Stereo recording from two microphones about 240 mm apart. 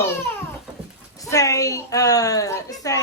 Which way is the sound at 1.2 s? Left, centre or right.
Centre.